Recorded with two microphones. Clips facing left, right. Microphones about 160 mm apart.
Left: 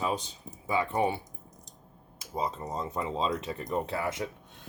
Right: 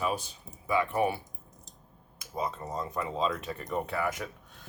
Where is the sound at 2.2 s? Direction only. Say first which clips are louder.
Left 1 dB; 25° left (ahead or behind).